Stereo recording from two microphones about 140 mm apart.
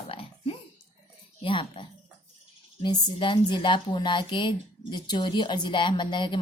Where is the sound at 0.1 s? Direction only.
40° left (ahead or behind).